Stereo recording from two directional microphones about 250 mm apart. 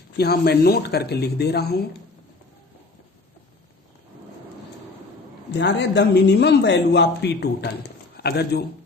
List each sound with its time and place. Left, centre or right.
0.2 s speech: left
5.5 s speech: left